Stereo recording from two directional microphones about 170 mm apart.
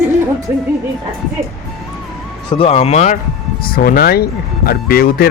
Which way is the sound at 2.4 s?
30° left (ahead or behind).